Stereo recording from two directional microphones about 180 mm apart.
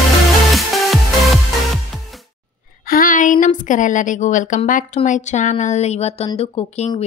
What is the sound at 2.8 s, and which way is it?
A woman's voice, 50° left (ahead or behind).